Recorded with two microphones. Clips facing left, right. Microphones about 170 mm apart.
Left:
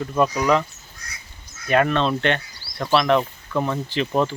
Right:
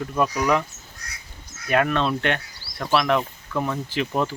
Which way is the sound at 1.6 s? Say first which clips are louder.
Left 2 dB; 5° right (ahead or behind).